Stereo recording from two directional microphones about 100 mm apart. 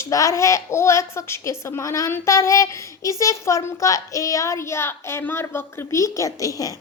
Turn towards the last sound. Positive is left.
turn(degrees=35)  # may be behind; listen again after turning